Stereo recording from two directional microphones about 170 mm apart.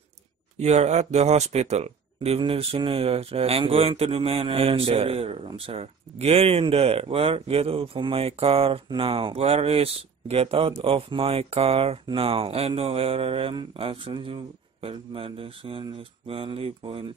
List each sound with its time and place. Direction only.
0.6 s speech: 40° right (ahead or behind)